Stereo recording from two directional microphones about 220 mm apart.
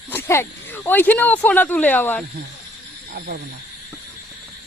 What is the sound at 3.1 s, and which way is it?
Speech, 40° right (ahead or behind).